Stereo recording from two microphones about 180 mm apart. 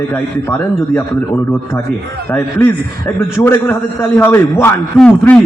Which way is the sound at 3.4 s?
10° left (ahead or behind).